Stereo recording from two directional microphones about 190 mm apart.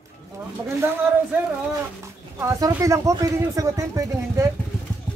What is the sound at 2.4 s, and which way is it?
Speech, 15° right (ahead or behind).